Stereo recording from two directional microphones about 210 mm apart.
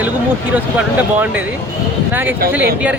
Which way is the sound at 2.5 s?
5° right (ahead or behind).